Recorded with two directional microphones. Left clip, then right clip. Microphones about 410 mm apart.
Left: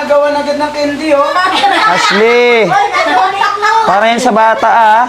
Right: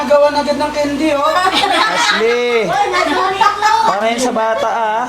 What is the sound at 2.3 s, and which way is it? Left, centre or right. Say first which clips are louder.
Speech: left 6 dB; left.